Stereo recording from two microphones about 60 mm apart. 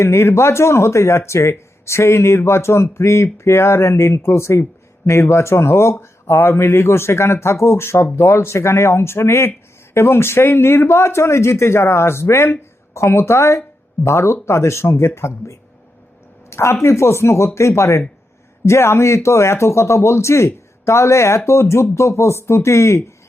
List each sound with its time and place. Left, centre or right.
0.0 s a man's voice: left
16.5 s a sound: left
16.8 s a man's voice: left